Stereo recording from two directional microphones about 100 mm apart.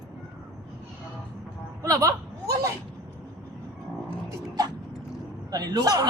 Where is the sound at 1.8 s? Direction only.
35° right (ahead or behind).